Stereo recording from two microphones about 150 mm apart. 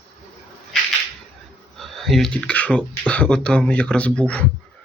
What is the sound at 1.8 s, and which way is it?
Speech, centre (ahead or behind).